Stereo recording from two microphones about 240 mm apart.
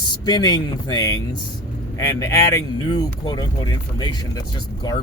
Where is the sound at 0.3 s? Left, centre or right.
Centre.